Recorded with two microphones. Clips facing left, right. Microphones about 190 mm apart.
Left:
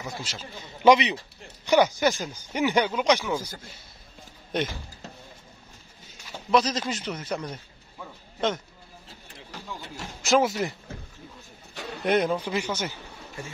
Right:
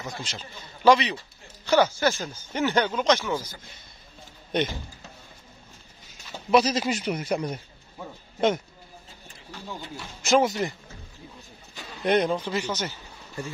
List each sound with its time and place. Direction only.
0.0 s speech: 5° left (ahead or behind)
0.8 s a man's voice: 20° left (ahead or behind)
4.5 s speech: centre (ahead or behind)
6.5 s a man's voice: 10° right (ahead or behind)
10.2 s speech: centre (ahead or behind)
12.0 s speech: 5° left (ahead or behind)